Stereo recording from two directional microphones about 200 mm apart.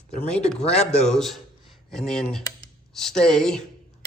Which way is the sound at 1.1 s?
Centre (ahead or behind).